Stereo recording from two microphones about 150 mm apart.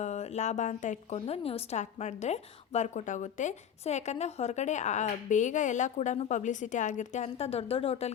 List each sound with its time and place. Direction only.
0.0 s speech: 50° left (ahead or behind)